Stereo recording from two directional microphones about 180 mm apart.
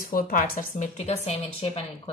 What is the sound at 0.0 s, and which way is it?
A woman's voice, 50° left (ahead or behind).